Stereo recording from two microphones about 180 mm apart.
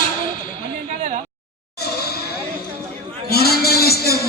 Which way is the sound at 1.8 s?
60° left (ahead or behind).